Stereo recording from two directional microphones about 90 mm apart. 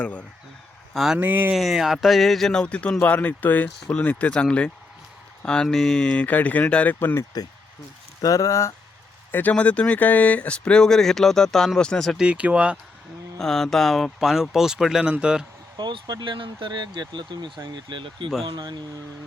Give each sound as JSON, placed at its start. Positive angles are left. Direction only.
{"t": 0.0, "sound": "speech", "side_deg": 15}
{"t": 0.9, "sound": "speech", "side_deg": -5}
{"t": 1.2, "sound": "speech", "side_deg": -20}
{"t": 1.5, "sound": "speech", "side_deg": 0}
{"t": 5.4, "sound": "a sound", "side_deg": 10}
{"t": 5.6, "sound": "speech", "side_deg": 5}
{"t": 7.0, "sound": "speech", "side_deg": 25}
{"t": 8.2, "sound": "speech", "side_deg": 40}
{"t": 9.3, "sound": "speech", "side_deg": 15}
{"t": 12.1, "sound": "speech", "side_deg": -10}
{"t": 13.4, "sound": "speech", "side_deg": 5}
{"t": 15.8, "sound": "speech", "side_deg": -55}
{"t": 18.4, "sound": "speech", "side_deg": -55}